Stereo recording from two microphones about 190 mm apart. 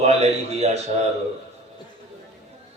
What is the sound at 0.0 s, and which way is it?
Speech, 35° right (ahead or behind).